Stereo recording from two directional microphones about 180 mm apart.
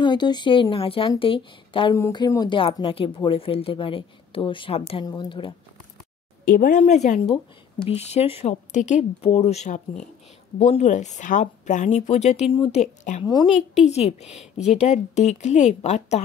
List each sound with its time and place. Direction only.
0.0 s speech: 25° left (ahead or behind)
6.4 s speech: 50° left (ahead or behind)